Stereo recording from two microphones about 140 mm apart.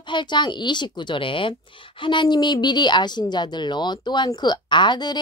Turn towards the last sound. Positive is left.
turn(degrees=30)  # may be behind; listen again after turning